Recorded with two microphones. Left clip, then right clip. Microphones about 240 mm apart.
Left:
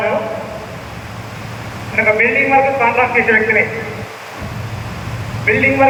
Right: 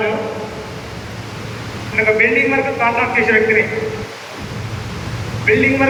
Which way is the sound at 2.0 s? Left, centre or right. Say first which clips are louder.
Left 1 dB; left.